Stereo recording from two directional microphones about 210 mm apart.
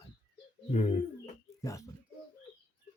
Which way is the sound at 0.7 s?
35° left (ahead or behind).